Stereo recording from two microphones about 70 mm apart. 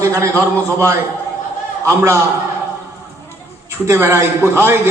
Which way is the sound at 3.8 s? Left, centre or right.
Right.